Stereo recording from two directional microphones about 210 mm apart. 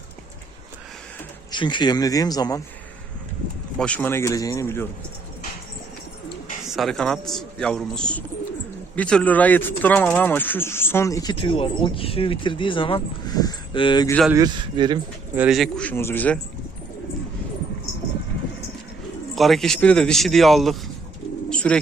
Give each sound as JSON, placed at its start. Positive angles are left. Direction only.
{"t": 1.5, "sound": "speech", "side_deg": 20}
{"t": 3.8, "sound": "speech", "side_deg": 5}
{"t": 6.7, "sound": "a man's voice", "side_deg": 0}
{"t": 14.3, "sound": "a man's voice", "side_deg": -20}
{"t": 15.4, "sound": "a man's voice", "side_deg": 0}
{"t": 19.4, "sound": "a man's voice", "side_deg": 0}
{"t": 21.5, "sound": "bird", "side_deg": 5}